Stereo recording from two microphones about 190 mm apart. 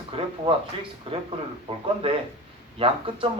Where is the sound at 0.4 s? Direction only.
25° right (ahead or behind).